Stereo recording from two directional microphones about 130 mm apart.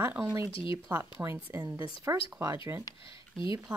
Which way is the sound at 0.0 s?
15° right (ahead or behind).